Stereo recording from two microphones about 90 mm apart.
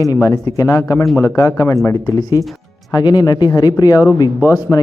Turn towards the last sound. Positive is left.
turn(degrees=35)  # may be behind; listen again after turning